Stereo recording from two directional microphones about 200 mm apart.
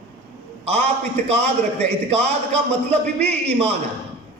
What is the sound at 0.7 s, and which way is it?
A man's voice, 30° right (ahead or behind).